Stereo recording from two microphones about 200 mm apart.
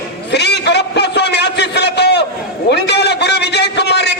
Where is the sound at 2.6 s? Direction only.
55° left (ahead or behind).